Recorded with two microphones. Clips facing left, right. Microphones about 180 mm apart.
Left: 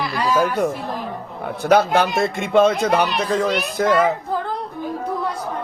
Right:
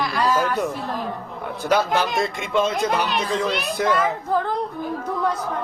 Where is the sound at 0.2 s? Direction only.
10° left (ahead or behind).